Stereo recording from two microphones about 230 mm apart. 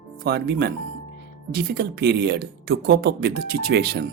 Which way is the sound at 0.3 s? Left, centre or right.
Right.